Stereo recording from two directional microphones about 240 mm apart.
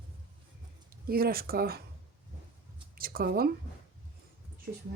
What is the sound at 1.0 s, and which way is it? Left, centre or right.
Speech, right.